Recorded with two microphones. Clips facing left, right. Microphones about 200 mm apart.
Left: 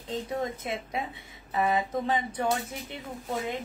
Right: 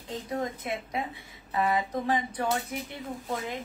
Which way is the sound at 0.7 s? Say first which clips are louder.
Even; 25° left (ahead or behind).